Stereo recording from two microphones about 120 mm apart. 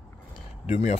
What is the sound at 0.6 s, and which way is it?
Speech, 75° left (ahead or behind).